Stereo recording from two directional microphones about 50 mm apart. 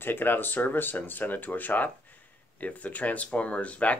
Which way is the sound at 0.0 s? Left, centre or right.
Left.